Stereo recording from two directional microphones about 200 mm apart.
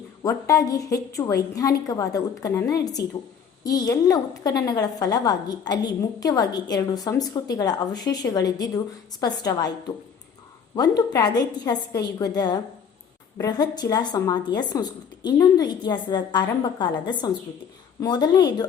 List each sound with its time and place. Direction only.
0.2 s a woman's voice: 15° left (ahead or behind)